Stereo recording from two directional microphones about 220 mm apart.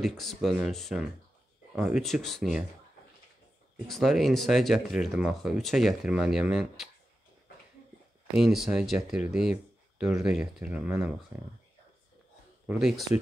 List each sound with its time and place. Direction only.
0.0 s speech: centre (ahead or behind)
3.7 s speech: centre (ahead or behind)
8.4 s speech: centre (ahead or behind)
12.6 s speech: centre (ahead or behind)